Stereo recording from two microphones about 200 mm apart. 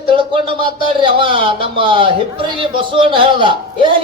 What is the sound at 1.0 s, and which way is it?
Speech, 25° right (ahead or behind).